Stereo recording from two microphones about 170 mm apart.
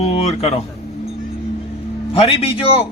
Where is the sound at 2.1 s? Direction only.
35° left (ahead or behind).